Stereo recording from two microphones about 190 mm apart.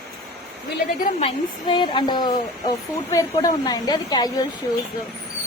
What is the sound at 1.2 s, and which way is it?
A woman's voice, 25° left (ahead or behind).